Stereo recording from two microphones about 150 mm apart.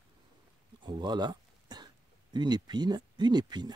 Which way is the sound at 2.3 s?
30° right (ahead or behind).